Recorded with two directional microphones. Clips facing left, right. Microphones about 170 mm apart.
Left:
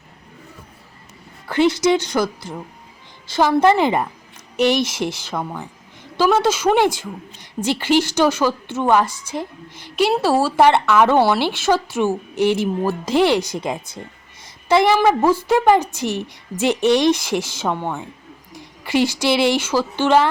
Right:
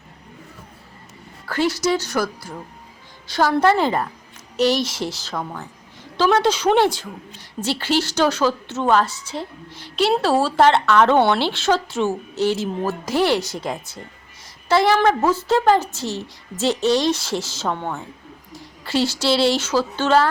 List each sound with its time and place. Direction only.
1.5 s a woman's voice: 20° left (ahead or behind)
5.3 s a woman's voice: 10° left (ahead or behind)